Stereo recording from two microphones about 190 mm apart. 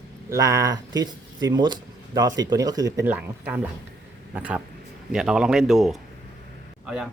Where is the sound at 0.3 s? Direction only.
15° right (ahead or behind).